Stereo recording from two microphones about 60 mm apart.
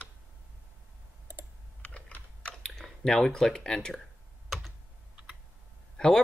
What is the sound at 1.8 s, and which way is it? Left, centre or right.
Typing, left.